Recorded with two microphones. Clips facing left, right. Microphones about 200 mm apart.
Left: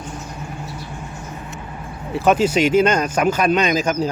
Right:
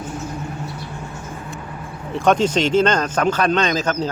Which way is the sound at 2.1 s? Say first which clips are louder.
Left 1 dB; 5° left (ahead or behind).